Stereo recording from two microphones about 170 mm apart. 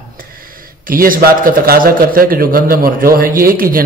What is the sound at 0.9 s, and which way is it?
A man's voice, 55° right (ahead or behind).